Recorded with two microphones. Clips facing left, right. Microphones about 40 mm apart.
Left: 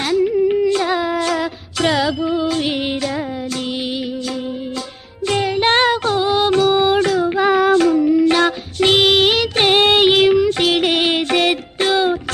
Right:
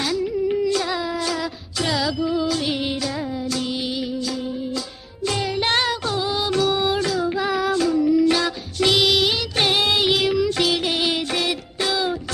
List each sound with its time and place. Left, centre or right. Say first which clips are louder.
0.0 s carnatic music: left 7 dB; left
0.6 s music: left 5 dB; left
5.2 s music: left 6 dB; left
7.3 s child singing: left 8 dB; left
9.6 s music: left 6 dB; left